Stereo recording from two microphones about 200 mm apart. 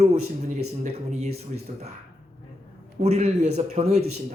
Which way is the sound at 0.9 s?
35° right (ahead or behind).